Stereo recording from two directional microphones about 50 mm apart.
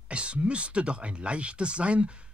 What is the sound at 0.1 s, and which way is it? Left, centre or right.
Speech, right.